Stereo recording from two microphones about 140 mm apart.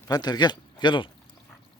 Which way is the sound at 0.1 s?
30° left (ahead or behind).